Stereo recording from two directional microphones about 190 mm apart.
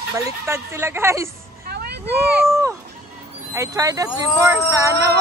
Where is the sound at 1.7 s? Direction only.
60° right (ahead or behind).